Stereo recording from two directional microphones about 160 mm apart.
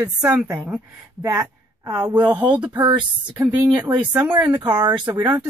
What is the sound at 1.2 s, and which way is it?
Speech, 25° right (ahead or behind).